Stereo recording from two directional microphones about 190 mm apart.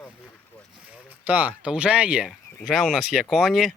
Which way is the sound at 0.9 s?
10° right (ahead or behind).